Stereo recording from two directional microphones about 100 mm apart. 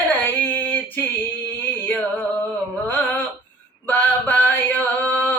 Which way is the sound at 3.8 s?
20° left (ahead or behind).